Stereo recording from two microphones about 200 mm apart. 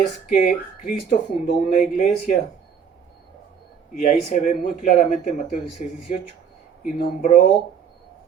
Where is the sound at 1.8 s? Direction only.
40° left (ahead or behind).